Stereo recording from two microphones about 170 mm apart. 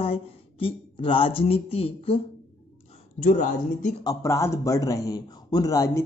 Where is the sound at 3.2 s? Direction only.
50° left (ahead or behind).